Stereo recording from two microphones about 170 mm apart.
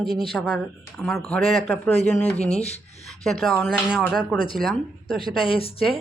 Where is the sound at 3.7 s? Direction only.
5° right (ahead or behind).